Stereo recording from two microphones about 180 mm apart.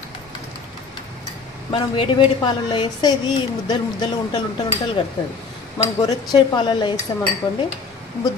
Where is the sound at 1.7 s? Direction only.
30° left (ahead or behind).